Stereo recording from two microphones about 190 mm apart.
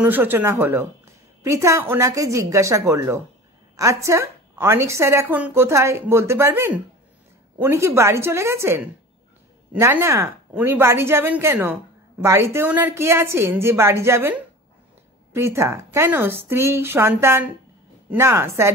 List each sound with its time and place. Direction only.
0.0 s speech: 10° right (ahead or behind)